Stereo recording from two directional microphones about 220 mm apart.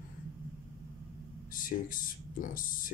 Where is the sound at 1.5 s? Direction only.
40° left (ahead or behind).